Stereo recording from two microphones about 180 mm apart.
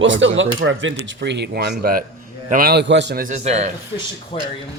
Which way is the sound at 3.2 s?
40° right (ahead or behind).